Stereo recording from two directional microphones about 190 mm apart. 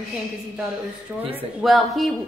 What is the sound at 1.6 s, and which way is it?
Speech, centre (ahead or behind).